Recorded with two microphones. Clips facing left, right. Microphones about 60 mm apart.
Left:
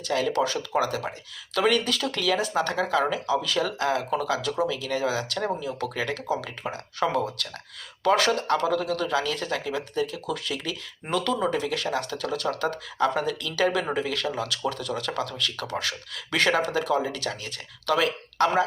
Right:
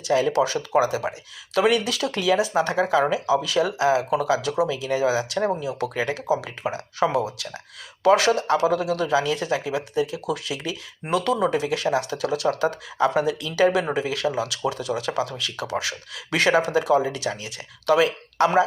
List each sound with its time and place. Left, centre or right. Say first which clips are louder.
0.0 s speech: right 4 dB; centre